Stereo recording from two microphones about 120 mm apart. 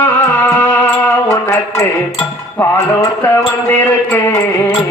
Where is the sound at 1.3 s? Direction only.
25° left (ahead or behind).